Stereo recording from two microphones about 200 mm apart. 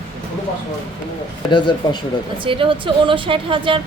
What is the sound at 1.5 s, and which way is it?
Speech, 20° left (ahead or behind).